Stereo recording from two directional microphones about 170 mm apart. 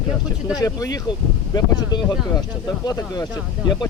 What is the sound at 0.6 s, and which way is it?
Speech, 20° left (ahead or behind).